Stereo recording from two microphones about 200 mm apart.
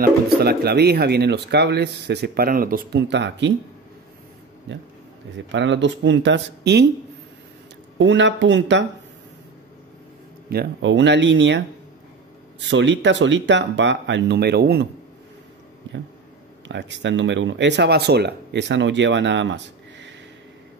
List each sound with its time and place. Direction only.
0.0 s speech: 50° right (ahead or behind)
5.5 s speech: 65° right (ahead or behind)
8.0 s speech: 65° right (ahead or behind)
10.5 s speech: 60° right (ahead or behind)
16.6 s speech: 60° right (ahead or behind)